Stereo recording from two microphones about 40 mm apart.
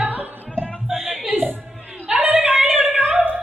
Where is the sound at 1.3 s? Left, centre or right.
Right.